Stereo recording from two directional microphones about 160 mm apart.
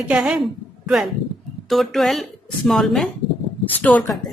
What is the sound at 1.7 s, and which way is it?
Speech, centre (ahead or behind).